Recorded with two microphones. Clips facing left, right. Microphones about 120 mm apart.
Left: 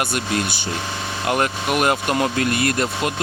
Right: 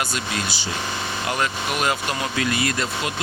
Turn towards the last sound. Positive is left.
turn(degrees=50)  # may be behind; listen again after turning